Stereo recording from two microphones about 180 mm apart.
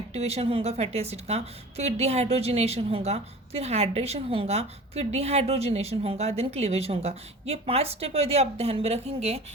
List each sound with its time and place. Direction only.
0.1 s a woman's voice: 35° right (ahead or behind)